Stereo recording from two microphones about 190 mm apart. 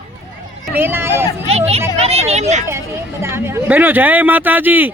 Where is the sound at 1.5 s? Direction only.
35° right (ahead or behind).